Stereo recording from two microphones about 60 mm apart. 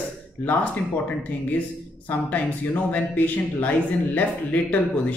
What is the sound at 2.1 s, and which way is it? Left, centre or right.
Speech, left.